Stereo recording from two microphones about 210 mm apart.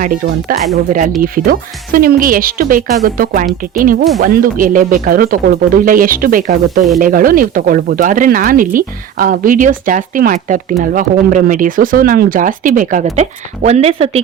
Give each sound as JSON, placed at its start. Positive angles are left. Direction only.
{"t": 0.0, "sound": "speech", "side_deg": -40}